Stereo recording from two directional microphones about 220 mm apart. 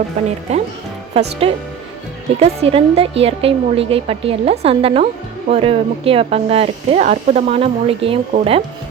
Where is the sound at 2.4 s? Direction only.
25° right (ahead or behind).